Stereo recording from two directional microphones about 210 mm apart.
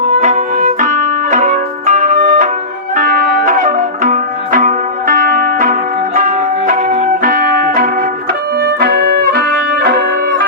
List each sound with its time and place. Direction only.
0.1 s music: 35° right (ahead or behind); by 10.4 s 50° right (ahead or behind)